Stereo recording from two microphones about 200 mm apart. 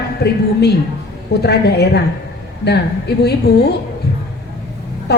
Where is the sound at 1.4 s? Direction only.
55° left (ahead or behind).